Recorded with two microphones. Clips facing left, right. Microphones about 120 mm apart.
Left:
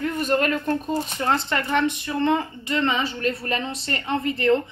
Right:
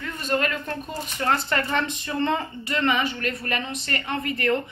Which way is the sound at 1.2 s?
15° left (ahead or behind).